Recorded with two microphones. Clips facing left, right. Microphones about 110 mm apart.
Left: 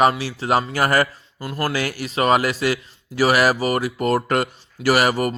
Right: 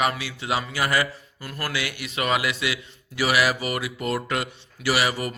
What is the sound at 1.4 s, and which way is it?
Speech, 30° left (ahead or behind).